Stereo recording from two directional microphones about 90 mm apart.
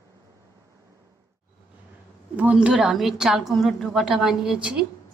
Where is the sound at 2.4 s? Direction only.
15° right (ahead or behind).